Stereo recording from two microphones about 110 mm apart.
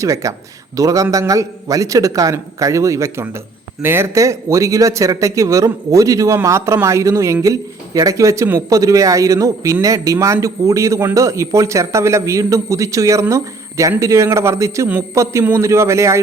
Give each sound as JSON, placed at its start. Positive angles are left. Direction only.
{"t": 0.0, "sound": "a man's voice", "side_deg": -30}